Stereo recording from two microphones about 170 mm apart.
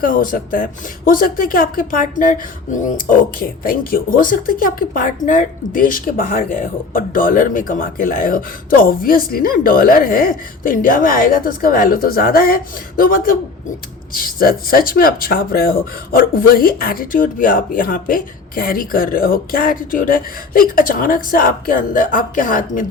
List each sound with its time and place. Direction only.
0.0 s speech: 55° left (ahead or behind)